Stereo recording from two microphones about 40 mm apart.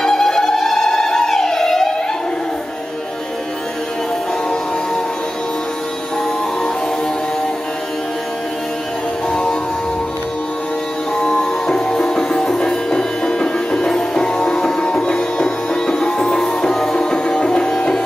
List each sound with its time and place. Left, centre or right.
0.0 s music: centre
9.3 s music: left
11.1 s music: left